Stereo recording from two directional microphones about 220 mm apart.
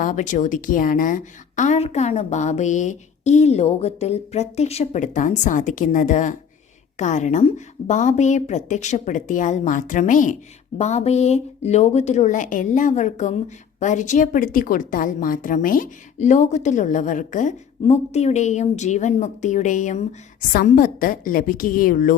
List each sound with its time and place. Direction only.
0.0 s speech: 35° left (ahead or behind)